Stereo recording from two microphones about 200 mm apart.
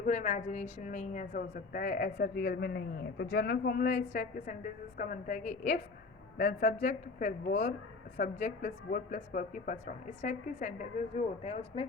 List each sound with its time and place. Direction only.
0.0 s a woman's voice: 40° left (ahead or behind)